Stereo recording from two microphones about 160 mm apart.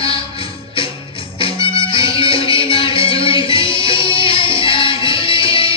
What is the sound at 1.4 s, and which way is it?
Music, 30° left (ahead or behind).